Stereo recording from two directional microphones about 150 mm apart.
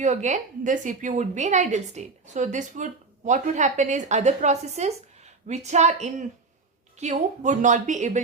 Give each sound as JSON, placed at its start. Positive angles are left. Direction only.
{"t": 0.0, "sound": "a woman's voice", "side_deg": -50}